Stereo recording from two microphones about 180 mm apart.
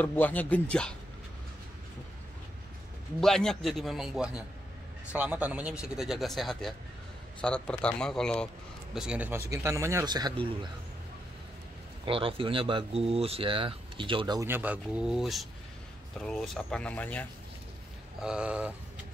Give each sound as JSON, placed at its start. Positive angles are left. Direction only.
{"t": 0.0, "sound": "speech", "side_deg": 10}
{"t": 3.2, "sound": "a man's voice", "side_deg": 0}
{"t": 12.1, "sound": "speech", "side_deg": -30}
{"t": 14.5, "sound": "a man's voice", "side_deg": -10}
{"t": 18.2, "sound": "a man's voice", "side_deg": -5}